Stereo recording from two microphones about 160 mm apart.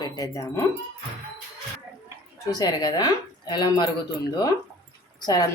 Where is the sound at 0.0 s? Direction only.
25° left (ahead or behind).